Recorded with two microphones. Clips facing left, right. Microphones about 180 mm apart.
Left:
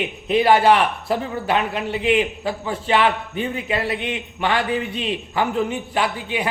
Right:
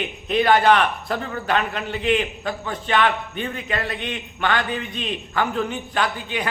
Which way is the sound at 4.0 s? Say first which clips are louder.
Left 2 dB; 25° left (ahead or behind).